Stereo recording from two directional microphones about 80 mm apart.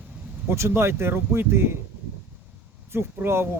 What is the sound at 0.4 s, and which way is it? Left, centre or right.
Speech, right.